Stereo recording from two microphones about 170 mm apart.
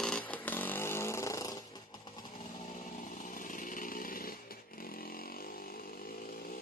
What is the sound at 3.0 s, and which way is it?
Chainsaw, 50° left (ahead or behind).